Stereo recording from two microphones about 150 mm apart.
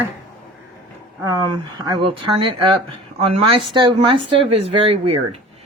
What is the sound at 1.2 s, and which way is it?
Speech, 25° right (ahead or behind).